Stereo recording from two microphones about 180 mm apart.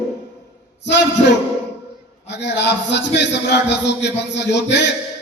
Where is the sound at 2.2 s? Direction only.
75° left (ahead or behind).